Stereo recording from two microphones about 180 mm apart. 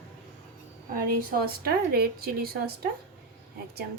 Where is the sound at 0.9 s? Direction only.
55° right (ahead or behind).